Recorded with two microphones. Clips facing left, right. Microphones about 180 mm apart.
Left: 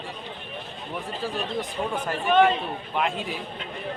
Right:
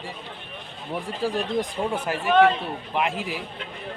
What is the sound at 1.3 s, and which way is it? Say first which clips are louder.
Speech: right 5 dB; 10° right (ahead or behind).